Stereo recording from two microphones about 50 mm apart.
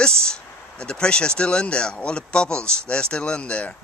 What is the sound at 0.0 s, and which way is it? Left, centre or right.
Speech, centre.